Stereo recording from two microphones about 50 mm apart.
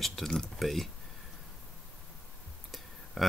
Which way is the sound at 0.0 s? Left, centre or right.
Centre.